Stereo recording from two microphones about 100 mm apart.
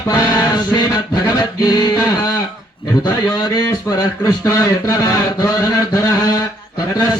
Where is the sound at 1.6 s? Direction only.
45° left (ahead or behind).